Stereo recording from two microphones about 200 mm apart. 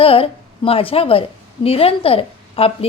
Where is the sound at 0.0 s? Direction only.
30° left (ahead or behind).